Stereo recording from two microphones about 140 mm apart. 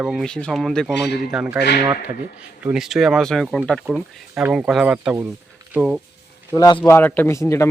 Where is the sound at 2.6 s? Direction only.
5° right (ahead or behind).